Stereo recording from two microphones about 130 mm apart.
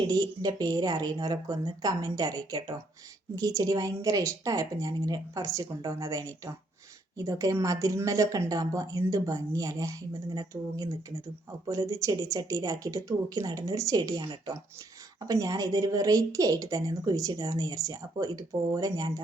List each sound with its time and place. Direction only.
0.1 s a woman's voice: 30° right (ahead or behind)